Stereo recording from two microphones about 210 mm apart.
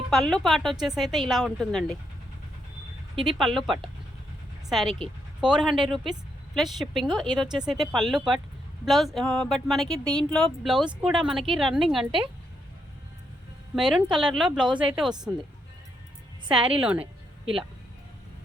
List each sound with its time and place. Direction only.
0.1 s speech: centre (ahead or behind)
3.2 s speech: centre (ahead or behind)
13.7 s speech: centre (ahead or behind)
16.6 s speech: 5° right (ahead or behind)